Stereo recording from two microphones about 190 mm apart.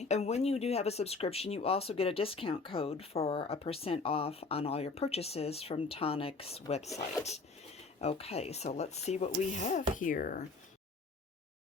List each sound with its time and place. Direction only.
0.0 s speech: 35° left (ahead or behind)
8.0 s speech: 35° left (ahead or behind)